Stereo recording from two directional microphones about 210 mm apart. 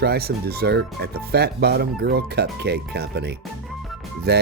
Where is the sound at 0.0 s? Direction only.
50° right (ahead or behind).